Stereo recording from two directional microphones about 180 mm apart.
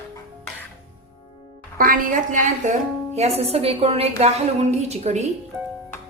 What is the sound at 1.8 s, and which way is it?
A woman's voice, 50° right (ahead or behind).